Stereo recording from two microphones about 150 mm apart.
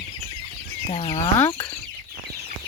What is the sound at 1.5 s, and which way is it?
Speech, 30° left (ahead or behind).